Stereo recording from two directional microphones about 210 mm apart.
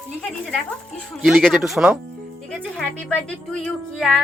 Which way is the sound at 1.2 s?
Centre (ahead or behind).